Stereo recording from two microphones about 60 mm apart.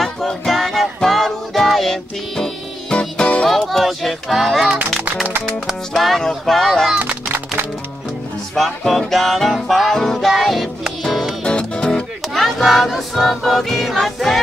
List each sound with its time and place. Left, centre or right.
0.0 s music: centre
3.4 s music: centre
5.9 s a sound: centre
7.0 s music: right
8.5 s music: centre
11.4 s music: centre
12.4 s choir: centre